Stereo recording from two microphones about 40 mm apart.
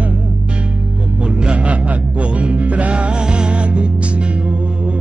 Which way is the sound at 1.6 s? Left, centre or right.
Right.